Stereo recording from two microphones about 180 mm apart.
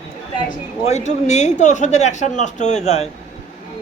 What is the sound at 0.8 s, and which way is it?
A man's voice, 40° left (ahead or behind).